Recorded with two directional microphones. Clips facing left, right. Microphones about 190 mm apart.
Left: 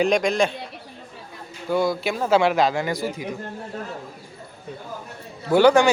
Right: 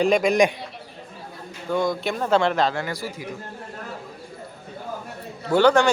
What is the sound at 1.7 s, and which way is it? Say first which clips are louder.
A man's voice: left 1 dB; 5° left (ahead or behind).